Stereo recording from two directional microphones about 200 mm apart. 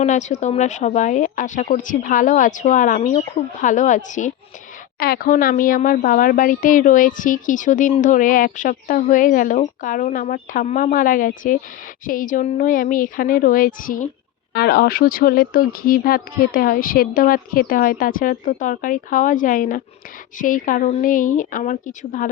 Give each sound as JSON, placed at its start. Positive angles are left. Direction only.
{"t": 0.0, "sound": "speech", "side_deg": 35}
{"t": 4.9, "sound": "speech", "side_deg": 50}